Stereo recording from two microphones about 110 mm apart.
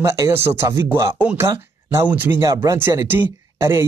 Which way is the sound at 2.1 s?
15° right (ahead or behind).